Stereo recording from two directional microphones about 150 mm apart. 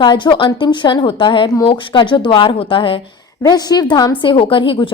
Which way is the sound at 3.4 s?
25° left (ahead or behind).